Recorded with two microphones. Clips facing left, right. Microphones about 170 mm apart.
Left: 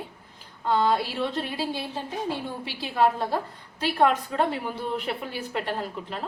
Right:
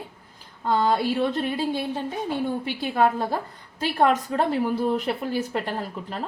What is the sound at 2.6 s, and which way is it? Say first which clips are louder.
A woman's voice: left 1 dB; 50° right (ahead or behind).